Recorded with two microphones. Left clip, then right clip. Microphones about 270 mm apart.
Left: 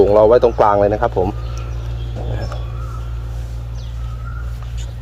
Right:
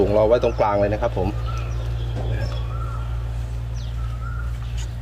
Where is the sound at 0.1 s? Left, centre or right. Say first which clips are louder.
Left 7 dB; centre.